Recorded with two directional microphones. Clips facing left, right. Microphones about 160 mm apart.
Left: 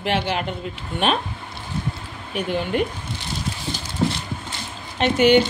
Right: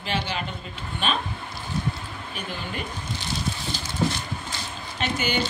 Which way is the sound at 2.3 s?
70° left (ahead or behind).